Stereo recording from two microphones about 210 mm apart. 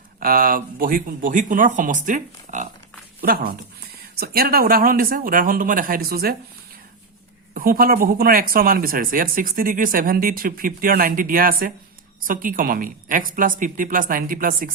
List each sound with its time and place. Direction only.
0.2 s speech: 45° right (ahead or behind)
7.5 s speech: 40° right (ahead or behind)